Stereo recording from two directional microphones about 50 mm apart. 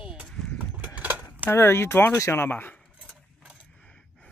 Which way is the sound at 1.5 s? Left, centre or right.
Left.